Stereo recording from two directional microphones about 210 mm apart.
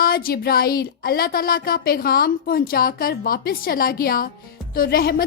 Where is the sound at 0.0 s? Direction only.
45° left (ahead or behind).